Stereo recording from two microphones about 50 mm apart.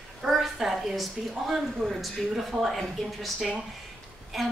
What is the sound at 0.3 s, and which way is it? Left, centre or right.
A woman's voice, centre.